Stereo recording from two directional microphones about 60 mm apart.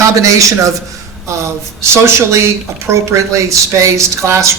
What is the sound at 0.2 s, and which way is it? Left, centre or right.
Speech, right.